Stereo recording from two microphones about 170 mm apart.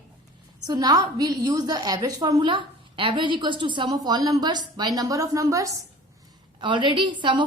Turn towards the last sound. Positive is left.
turn(degrees=-30)  # may be behind; listen again after turning